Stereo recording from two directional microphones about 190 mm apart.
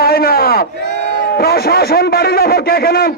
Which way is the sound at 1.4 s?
55° left (ahead or behind).